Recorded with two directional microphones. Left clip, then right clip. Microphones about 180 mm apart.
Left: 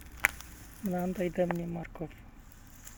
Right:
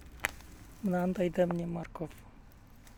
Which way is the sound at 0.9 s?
25° right (ahead or behind).